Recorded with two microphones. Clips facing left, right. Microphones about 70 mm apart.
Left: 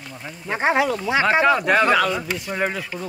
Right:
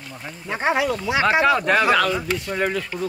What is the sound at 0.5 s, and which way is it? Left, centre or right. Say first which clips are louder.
Speech: left 1 dB; left.